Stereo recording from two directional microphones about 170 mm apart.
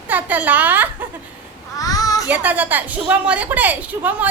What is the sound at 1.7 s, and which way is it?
Child singing, 20° left (ahead or behind).